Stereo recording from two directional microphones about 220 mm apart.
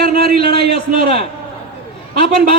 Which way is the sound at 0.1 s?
45° right (ahead or behind).